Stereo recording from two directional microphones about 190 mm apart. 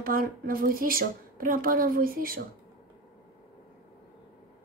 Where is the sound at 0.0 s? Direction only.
50° right (ahead or behind).